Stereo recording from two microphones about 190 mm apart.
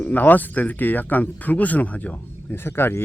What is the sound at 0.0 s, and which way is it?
Speech, 10° left (ahead or behind).